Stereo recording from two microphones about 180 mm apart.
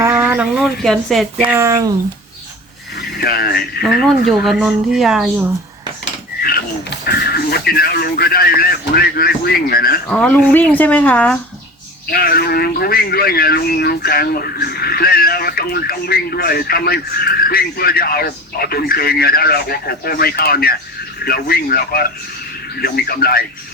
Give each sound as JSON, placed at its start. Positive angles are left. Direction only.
{"t": 0.0, "sound": "speech", "side_deg": -10}
{"t": 1.4, "sound": "speech", "side_deg": -15}
{"t": 3.2, "sound": "speech", "side_deg": 60}
{"t": 3.8, "sound": "speech", "side_deg": 0}
{"t": 7.0, "sound": "a man's voice", "side_deg": 60}
{"t": 10.1, "sound": "speech", "side_deg": 5}
{"t": 12.1, "sound": "a man's voice", "side_deg": 55}